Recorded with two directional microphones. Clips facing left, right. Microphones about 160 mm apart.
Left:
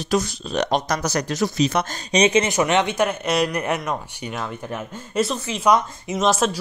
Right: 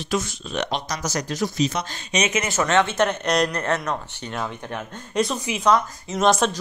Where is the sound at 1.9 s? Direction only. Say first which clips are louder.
Left 6 dB; 35° left (ahead or behind).